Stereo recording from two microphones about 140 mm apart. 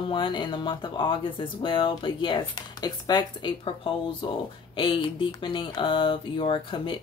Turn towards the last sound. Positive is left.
turn(degrees=35)  # may be behind; listen again after turning